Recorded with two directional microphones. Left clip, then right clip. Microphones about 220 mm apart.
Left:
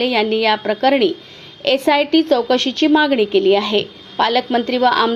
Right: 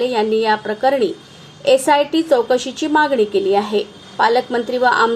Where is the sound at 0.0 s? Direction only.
25° left (ahead or behind).